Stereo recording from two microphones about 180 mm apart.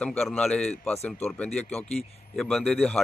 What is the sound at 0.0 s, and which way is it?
A man's voice, 5° left (ahead or behind).